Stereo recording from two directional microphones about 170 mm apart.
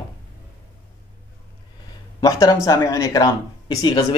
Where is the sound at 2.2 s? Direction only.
20° left (ahead or behind).